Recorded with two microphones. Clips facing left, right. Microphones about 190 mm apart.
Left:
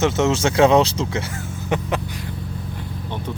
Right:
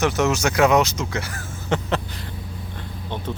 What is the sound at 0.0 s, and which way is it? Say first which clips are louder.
Speech: left 2 dB; 25° left (ahead or behind).